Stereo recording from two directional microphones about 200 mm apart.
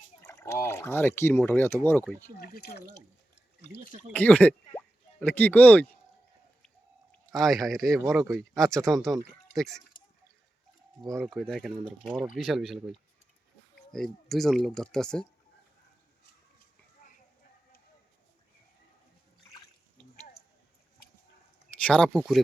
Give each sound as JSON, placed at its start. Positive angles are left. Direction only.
{"t": 0.2, "sound": "speech", "side_deg": 15}
{"t": 2.4, "sound": "speech", "side_deg": 45}
{"t": 4.1, "sound": "speech", "side_deg": 5}
{"t": 7.1, "sound": "speech", "side_deg": 0}
{"t": 11.0, "sound": "speech", "side_deg": -15}
{"t": 11.3, "sound": "speech", "side_deg": 0}
{"t": 21.7, "sound": "speech", "side_deg": 5}